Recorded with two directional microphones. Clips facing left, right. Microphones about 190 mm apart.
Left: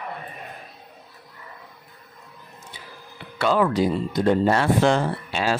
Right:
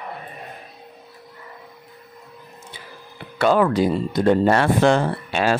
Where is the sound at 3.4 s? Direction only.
50° right (ahead or behind).